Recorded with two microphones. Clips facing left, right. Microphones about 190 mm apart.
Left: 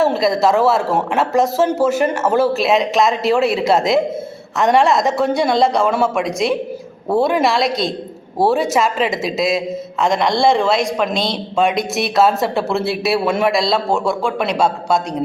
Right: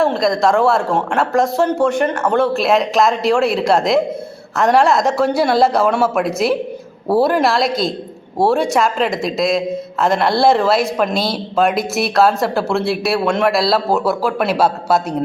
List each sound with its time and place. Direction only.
0.0 s a man's voice: 5° left (ahead or behind)